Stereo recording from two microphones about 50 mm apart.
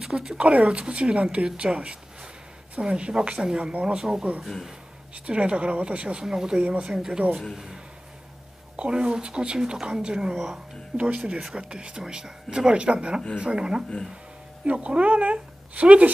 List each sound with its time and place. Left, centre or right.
0.0 s a woman's voice: centre
6.2 s speech: centre
10.3 s speech: centre
11.0 s a woman's voice: right